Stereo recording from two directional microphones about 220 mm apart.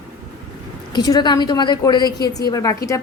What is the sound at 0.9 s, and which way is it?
A woman's voice, 20° left (ahead or behind).